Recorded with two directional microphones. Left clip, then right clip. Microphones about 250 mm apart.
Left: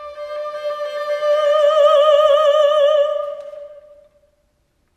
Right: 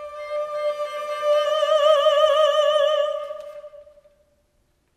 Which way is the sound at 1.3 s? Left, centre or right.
Right.